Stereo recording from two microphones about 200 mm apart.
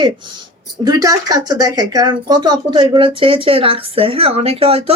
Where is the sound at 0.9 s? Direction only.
15° right (ahead or behind).